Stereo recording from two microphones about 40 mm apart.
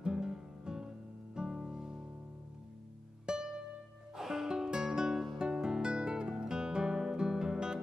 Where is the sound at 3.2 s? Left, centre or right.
Centre.